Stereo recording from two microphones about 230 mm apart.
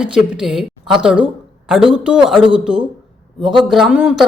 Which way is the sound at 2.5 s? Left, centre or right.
Centre.